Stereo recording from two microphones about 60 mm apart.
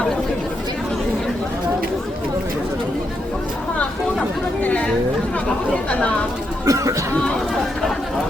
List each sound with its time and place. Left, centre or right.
4.6 s chatter: centre
5.9 s speech: left
6.7 s a sound: right